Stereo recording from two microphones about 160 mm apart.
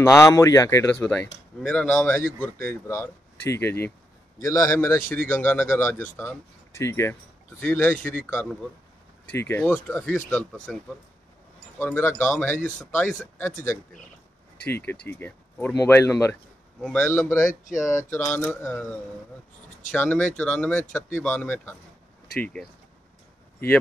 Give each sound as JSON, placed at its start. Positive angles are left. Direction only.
{"t": 0.0, "sound": "a man's voice", "side_deg": 20}
{"t": 11.8, "sound": "speech", "side_deg": 10}
{"t": 14.9, "sound": "speech", "side_deg": 15}
{"t": 19.9, "sound": "speech", "side_deg": 10}